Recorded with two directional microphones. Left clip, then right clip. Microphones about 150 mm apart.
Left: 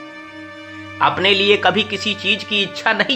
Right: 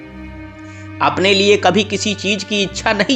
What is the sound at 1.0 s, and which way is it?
Speech, 45° right (ahead or behind).